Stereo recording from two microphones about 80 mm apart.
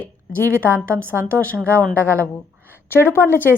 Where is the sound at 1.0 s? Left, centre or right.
Right.